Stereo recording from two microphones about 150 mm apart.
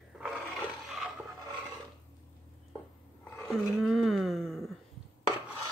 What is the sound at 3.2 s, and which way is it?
Roar, 15° left (ahead or behind).